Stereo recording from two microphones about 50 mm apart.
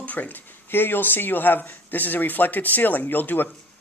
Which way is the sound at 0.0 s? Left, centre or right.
Left.